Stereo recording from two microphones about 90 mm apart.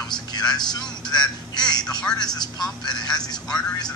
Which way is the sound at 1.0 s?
50° left (ahead or behind).